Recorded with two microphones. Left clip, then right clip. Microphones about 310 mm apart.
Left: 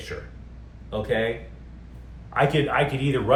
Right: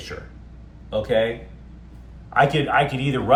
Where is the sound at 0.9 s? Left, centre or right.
Centre.